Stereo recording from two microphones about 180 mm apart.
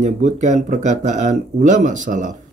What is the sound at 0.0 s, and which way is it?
Speech, 40° right (ahead or behind).